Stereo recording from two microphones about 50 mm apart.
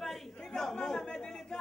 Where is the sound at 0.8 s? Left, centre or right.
Centre.